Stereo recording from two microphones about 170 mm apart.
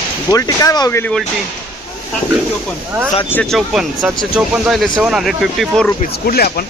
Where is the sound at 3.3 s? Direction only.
5° left (ahead or behind).